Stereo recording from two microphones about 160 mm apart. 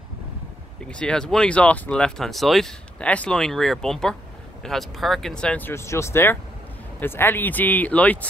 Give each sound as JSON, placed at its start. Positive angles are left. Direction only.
{"t": 0.8, "sound": "speech", "side_deg": 5}